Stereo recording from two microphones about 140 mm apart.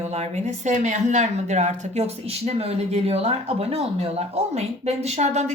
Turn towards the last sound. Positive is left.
turn(degrees=-50)  # may be behind; listen again after turning